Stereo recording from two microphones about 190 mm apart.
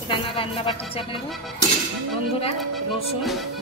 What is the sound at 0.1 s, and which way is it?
Speech, 30° left (ahead or behind).